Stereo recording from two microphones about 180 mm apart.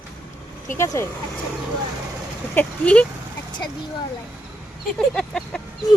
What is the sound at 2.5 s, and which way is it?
Speech, 10° left (ahead or behind).